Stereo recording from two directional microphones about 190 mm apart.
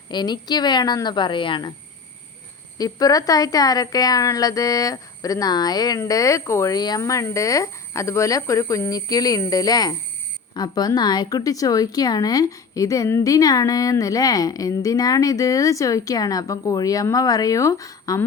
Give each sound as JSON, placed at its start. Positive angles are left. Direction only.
{"t": 0.1, "sound": "speech", "side_deg": 20}
{"t": 2.7, "sound": "speech", "side_deg": 20}